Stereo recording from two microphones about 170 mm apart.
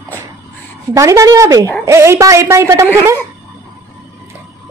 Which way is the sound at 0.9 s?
20° right (ahead or behind).